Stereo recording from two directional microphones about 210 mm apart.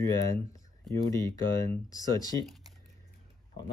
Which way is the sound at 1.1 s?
15° left (ahead or behind).